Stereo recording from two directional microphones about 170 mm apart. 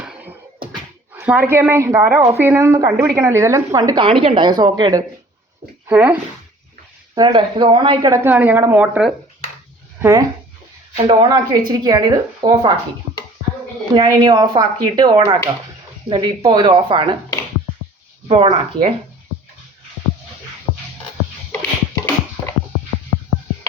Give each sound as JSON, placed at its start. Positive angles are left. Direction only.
{"t": 0.0, "sound": "music", "side_deg": -10}
{"t": 1.1, "sound": "a woman's voice", "side_deg": -10}
{"t": 5.9, "sound": "a woman's voice", "side_deg": -10}
{"t": 7.2, "sound": "a woman's voice", "side_deg": -25}
{"t": 8.2, "sound": "a woman's voice", "side_deg": -10}
{"t": 10.0, "sound": "a woman's voice", "side_deg": -15}
{"t": 13.9, "sound": "a woman's voice", "side_deg": -25}
{"t": 18.3, "sound": "speech", "side_deg": -35}
{"t": 21.5, "sound": "a sound", "side_deg": 15}